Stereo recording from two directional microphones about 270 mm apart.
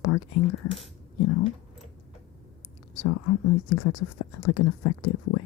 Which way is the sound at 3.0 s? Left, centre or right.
Left.